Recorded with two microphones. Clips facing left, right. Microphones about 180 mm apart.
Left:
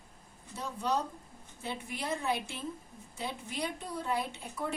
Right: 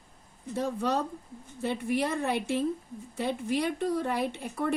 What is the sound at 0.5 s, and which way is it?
Speech, 60° right (ahead or behind).